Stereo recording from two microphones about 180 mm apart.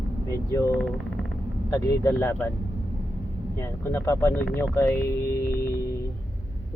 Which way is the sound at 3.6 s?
15° left (ahead or behind).